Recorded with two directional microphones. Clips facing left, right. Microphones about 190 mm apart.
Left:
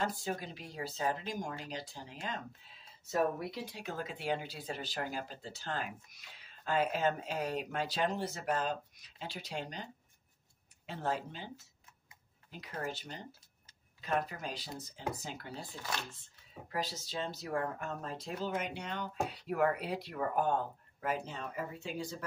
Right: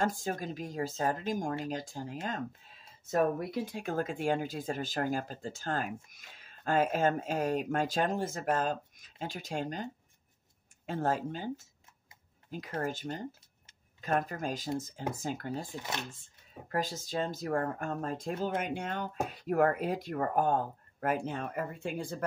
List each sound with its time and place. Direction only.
0.0 s speech: 45° right (ahead or behind)
10.9 s speech: 45° right (ahead or behind)
15.7 s speech: 20° right (ahead or behind)
16.6 s speech: 50° right (ahead or behind)